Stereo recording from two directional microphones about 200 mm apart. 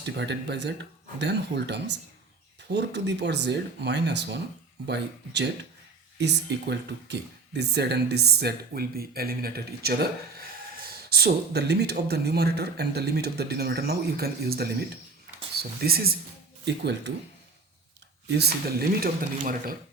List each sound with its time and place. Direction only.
0.0 s speech: 60° right (ahead or behind)
18.3 s speech: 55° right (ahead or behind)